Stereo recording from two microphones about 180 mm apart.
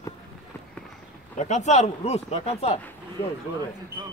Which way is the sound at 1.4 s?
40° left (ahead or behind).